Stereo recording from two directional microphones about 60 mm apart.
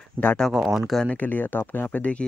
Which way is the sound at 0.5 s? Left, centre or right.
Centre.